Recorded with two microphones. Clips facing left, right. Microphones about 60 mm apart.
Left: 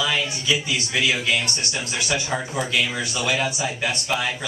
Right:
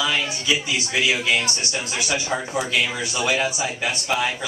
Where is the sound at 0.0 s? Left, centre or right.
Centre.